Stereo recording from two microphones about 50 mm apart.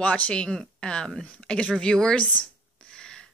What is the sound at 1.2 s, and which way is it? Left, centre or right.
Speech, left.